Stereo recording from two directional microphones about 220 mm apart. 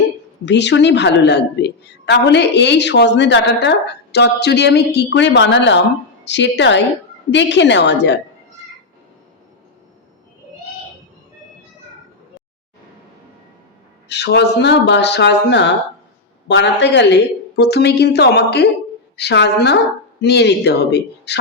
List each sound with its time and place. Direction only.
0.4 s a woman's voice: 55° left (ahead or behind)
14.1 s a woman's voice: 50° left (ahead or behind)